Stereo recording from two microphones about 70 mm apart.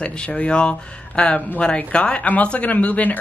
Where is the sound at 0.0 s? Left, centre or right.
Centre.